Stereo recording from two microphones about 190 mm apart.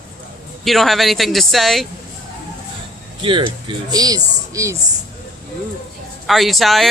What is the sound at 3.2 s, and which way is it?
Speech, 25° right (ahead or behind).